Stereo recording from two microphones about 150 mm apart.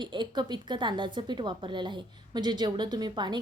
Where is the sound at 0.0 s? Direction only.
30° right (ahead or behind).